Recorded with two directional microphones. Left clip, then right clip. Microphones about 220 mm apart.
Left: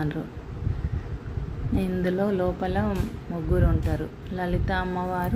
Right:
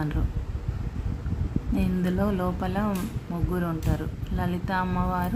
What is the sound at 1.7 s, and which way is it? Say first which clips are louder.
A woman's voice: left 3 dB; 20° right (ahead or behind).